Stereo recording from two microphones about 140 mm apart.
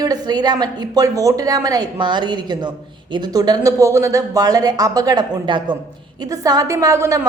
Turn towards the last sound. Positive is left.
turn(degrees=-20)  # may be behind; listen again after turning